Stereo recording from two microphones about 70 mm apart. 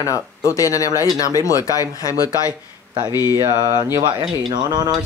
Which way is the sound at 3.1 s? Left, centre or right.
Left.